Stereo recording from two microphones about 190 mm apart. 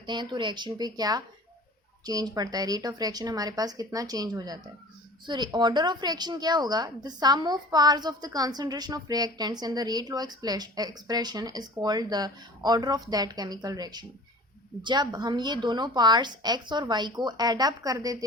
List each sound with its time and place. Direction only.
0.0 s a woman's voice: 25° right (ahead or behind)